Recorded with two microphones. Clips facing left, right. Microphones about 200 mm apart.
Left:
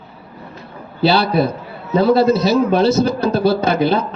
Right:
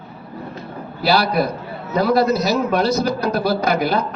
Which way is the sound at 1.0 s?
25° left (ahead or behind).